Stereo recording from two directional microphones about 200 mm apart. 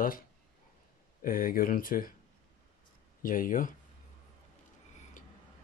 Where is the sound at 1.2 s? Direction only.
45° left (ahead or behind).